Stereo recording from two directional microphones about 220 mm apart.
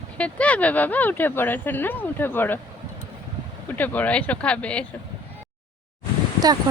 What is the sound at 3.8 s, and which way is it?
Speech, 5° left (ahead or behind).